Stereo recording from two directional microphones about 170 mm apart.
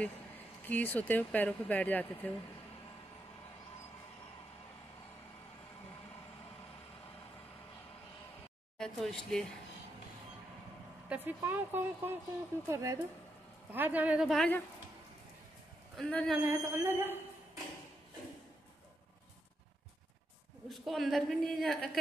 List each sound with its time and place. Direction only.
0.7 s speech: 10° left (ahead or behind)
8.7 s speech: 5° left (ahead or behind)
11.1 s speech: 10° right (ahead or behind)
16.0 s a woman's voice: 5° left (ahead or behind)
16.4 s speech: 15° right (ahead or behind)
20.6 s a woman's voice: centre (ahead or behind)